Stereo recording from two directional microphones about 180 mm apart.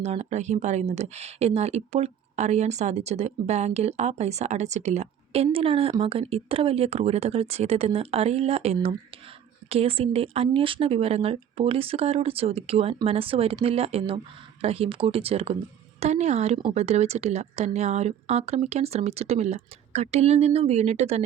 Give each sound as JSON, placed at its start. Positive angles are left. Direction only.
{"t": 0.0, "sound": "speech", "side_deg": -40}